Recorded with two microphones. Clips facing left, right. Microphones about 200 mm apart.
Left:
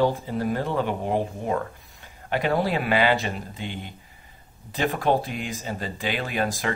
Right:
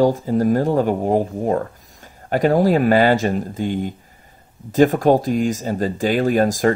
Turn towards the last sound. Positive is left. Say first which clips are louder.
# right 11 dB
turn(degrees=-45)  # may be behind; listen again after turning